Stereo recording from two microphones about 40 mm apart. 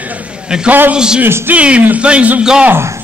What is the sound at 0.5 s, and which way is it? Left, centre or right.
Speech, centre.